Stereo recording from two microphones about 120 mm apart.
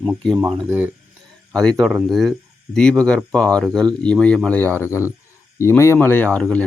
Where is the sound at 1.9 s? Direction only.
5° right (ahead or behind).